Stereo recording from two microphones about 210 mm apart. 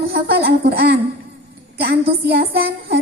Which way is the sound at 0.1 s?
50° right (ahead or behind).